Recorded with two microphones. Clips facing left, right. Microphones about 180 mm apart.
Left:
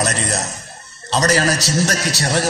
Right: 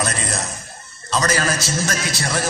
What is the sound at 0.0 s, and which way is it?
A man's voice, 40° left (ahead or behind).